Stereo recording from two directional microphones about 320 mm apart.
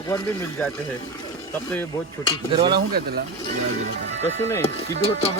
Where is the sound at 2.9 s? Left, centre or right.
Right.